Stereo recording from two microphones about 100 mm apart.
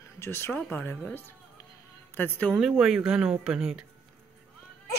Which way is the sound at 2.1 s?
20° left (ahead or behind).